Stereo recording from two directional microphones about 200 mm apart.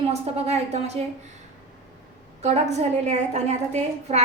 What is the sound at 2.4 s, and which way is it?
A woman's voice, 35° right (ahead or behind).